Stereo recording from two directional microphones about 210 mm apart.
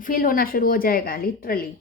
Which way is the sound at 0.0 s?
40° left (ahead or behind).